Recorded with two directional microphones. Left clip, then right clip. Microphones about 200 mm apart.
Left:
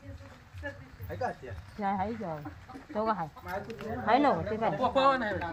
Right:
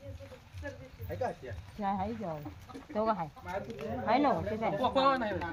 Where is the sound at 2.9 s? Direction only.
10° left (ahead or behind).